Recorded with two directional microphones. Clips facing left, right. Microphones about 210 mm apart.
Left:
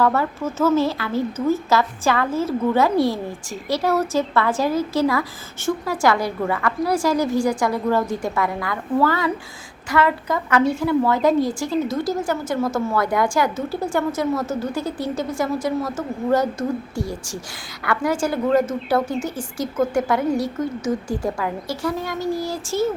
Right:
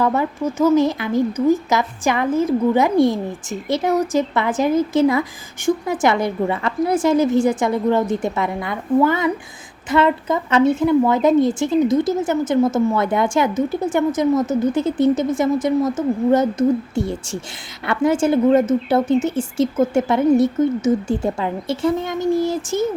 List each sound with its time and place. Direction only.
0.0 s a woman's voice: 15° right (ahead or behind)